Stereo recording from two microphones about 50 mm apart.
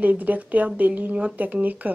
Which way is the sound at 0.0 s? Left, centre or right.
Right.